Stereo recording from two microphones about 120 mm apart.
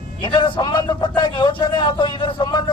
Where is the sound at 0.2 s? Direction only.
40° left (ahead or behind).